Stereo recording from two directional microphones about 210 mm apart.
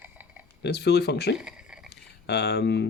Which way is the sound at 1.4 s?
5° right (ahead or behind).